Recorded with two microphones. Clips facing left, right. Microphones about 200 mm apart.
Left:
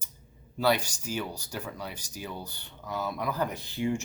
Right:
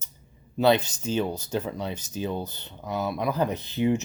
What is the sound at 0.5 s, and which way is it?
Speech, 25° right (ahead or behind).